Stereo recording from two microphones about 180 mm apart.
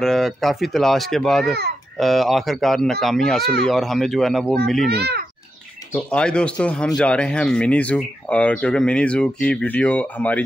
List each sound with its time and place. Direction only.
0.0 s speech: centre (ahead or behind)
4.8 s a child's voice: 65° right (ahead or behind)
5.9 s speech: 5° left (ahead or behind)